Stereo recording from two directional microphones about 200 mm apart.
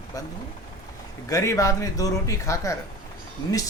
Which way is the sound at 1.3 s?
15° left (ahead or behind).